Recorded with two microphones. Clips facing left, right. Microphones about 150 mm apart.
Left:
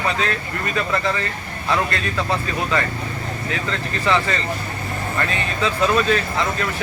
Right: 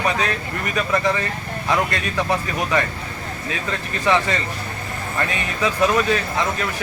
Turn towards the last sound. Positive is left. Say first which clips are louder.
# even
turn(degrees=-15)  # may be behind; listen again after turning